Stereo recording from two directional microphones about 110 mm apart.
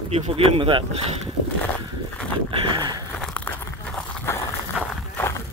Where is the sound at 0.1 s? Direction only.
60° right (ahead or behind).